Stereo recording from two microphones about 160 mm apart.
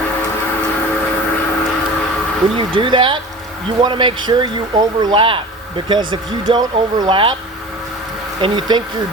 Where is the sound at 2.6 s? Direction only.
30° right (ahead or behind).